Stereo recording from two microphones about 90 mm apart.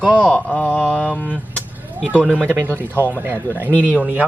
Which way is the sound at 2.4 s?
25° right (ahead or behind).